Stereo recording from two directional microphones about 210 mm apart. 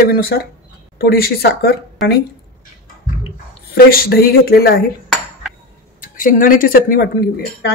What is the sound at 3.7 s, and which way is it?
Speech, 45° left (ahead or behind).